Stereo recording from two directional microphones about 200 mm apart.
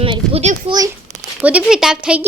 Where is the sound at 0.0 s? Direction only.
30° right (ahead or behind).